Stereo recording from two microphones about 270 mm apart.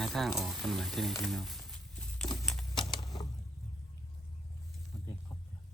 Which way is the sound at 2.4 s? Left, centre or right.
Centre.